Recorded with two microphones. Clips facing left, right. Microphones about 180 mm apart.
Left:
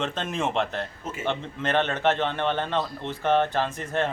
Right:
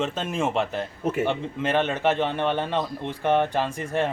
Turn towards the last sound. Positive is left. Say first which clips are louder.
# right 1 dB
turn(degrees=-10)  # may be behind; listen again after turning